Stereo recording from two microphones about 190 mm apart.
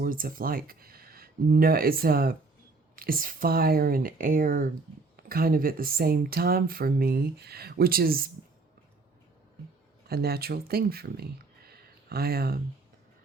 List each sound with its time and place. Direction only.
0.0 s speech: 50° right (ahead or behind)
10.1 s speech: 55° right (ahead or behind)